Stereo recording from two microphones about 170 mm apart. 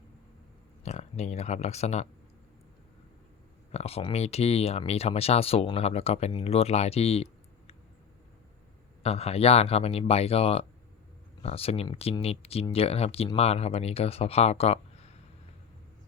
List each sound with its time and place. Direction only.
0.9 s speech: 40° left (ahead or behind)
3.7 s speech: 40° left (ahead or behind)
9.0 s speech: 35° left (ahead or behind)